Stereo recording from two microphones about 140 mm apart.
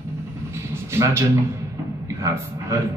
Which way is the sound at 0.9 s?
20° right (ahead or behind).